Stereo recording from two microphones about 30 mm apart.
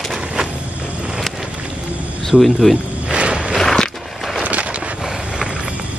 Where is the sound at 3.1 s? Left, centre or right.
Right.